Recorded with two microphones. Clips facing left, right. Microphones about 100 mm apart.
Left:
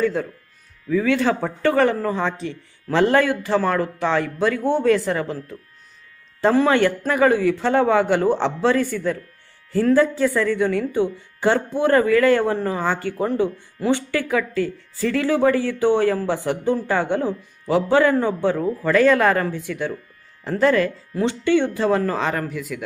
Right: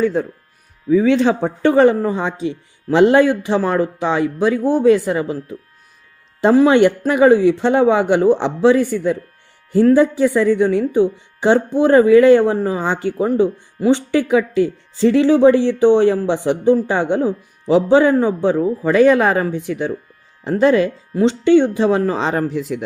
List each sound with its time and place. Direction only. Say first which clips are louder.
0.0 s speech: right 4 dB; 20° right (ahead or behind)